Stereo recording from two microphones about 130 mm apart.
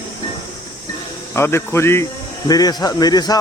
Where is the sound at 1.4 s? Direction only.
20° left (ahead or behind).